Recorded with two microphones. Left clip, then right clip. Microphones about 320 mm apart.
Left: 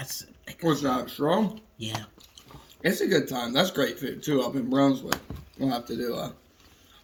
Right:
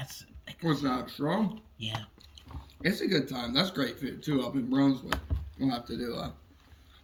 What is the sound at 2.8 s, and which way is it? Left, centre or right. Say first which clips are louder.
Speech: left 5 dB; centre.